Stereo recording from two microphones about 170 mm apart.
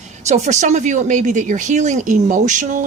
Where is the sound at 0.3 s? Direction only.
40° right (ahead or behind).